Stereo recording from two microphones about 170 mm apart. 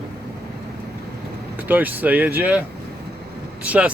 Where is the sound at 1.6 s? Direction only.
10° right (ahead or behind).